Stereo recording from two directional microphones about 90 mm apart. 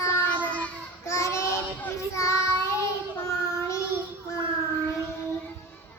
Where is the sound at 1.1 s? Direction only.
30° left (ahead or behind).